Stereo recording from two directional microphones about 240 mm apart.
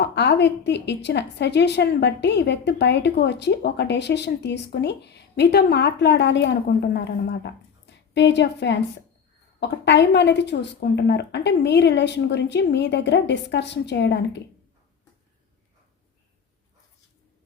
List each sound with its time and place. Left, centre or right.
0.0 s a woman's voice: left